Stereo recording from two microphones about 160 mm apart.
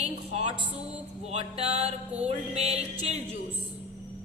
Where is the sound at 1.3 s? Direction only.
40° right (ahead or behind).